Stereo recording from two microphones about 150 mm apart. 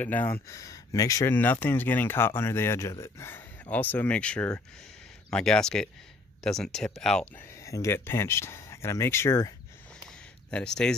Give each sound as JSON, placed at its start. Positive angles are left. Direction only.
{"t": 0.0, "sound": "speech", "side_deg": 15}
{"t": 1.3, "sound": "speech", "side_deg": 10}
{"t": 7.4, "sound": "a sound", "side_deg": 20}
{"t": 7.8, "sound": "speech", "side_deg": 15}
{"t": 10.5, "sound": "speech", "side_deg": 5}